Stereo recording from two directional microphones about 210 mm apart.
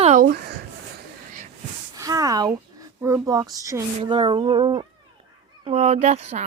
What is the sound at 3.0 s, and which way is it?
A child's voice, 15° right (ahead or behind).